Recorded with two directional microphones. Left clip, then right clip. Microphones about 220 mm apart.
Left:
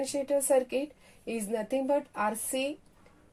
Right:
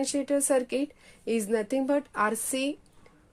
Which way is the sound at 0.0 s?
40° right (ahead or behind).